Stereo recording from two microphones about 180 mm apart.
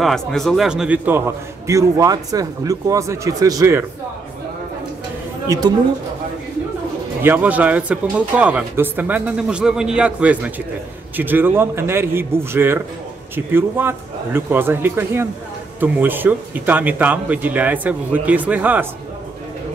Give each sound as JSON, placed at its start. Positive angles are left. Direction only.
{"t": 0.0, "sound": "a man's voice", "side_deg": 0}
{"t": 7.2, "sound": "a man's voice", "side_deg": -10}